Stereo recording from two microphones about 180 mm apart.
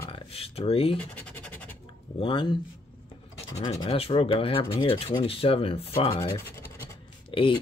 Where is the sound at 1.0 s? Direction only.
10° left (ahead or behind).